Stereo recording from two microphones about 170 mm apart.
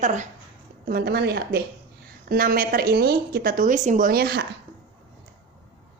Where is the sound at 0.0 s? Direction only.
45° right (ahead or behind).